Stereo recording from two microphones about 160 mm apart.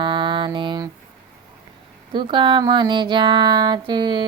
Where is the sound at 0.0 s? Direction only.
30° right (ahead or behind).